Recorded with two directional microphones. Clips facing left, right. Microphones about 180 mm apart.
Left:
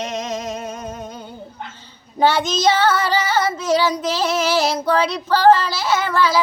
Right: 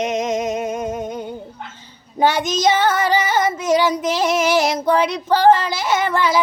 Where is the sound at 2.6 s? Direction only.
20° right (ahead or behind).